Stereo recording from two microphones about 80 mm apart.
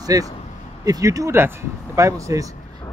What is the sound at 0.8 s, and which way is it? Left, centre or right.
Speech, right.